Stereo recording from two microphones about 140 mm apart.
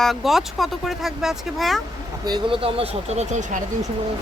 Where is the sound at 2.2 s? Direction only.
35° right (ahead or behind).